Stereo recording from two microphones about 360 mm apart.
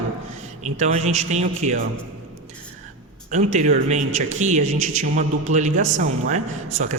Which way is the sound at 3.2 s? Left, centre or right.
Centre.